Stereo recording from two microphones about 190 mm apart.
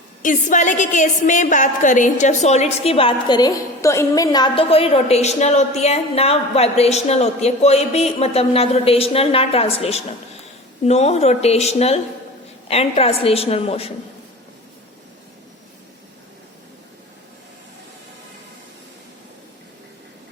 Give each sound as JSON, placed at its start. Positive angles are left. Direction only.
{"t": 0.2, "sound": "a woman's voice", "side_deg": 45}